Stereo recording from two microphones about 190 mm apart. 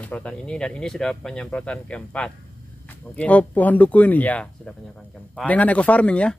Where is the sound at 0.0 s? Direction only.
5° left (ahead or behind).